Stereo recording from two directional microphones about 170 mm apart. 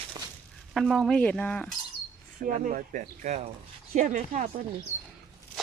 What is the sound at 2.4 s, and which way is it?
Speech, 50° right (ahead or behind).